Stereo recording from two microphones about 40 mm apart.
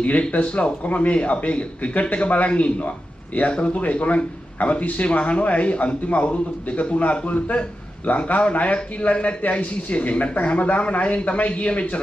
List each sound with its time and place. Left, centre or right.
0.3 s speech: left